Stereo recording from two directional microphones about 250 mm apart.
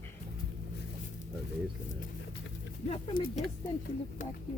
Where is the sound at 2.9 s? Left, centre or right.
Left.